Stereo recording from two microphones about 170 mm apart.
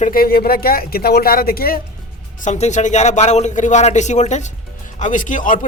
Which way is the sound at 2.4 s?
45° left (ahead or behind).